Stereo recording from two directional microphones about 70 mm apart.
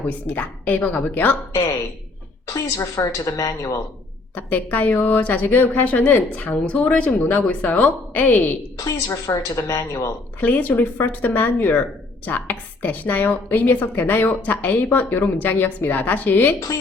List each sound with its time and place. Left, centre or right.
0.0 s speech: left
2.5 s a woman's voice: left
4.4 s speech: left
8.8 s a woman's voice: left
10.4 s speech: left